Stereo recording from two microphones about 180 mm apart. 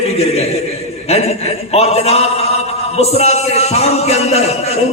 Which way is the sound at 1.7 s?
35° left (ahead or behind).